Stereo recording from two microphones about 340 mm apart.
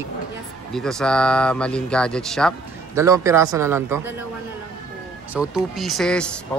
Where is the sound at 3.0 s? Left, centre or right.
Centre.